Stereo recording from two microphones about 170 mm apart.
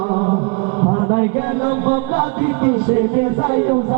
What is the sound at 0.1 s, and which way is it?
Mantra, 35° right (ahead or behind).